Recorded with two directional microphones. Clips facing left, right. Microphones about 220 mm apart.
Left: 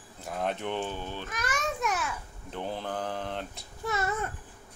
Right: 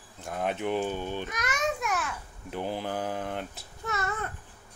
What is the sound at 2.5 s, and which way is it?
Speech, 5° right (ahead or behind).